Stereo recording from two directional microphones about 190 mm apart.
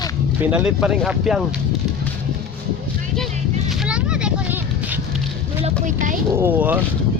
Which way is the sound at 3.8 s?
5° right (ahead or behind).